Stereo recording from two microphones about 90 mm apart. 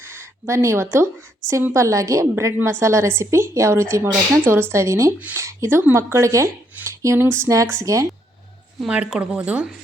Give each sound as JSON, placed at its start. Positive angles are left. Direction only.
{"t": 0.0, "sound": "a woman's voice", "side_deg": -25}
{"t": 2.3, "sound": "a woman's voice", "side_deg": -25}
{"t": 8.9, "sound": "speech", "side_deg": -10}